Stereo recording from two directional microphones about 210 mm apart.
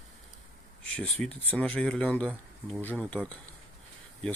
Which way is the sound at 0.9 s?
5° left (ahead or behind).